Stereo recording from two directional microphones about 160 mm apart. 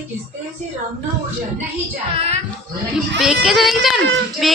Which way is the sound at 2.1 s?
40° right (ahead or behind).